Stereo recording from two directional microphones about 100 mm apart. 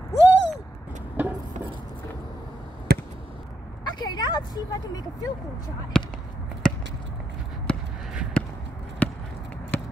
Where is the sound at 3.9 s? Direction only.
45° left (ahead or behind).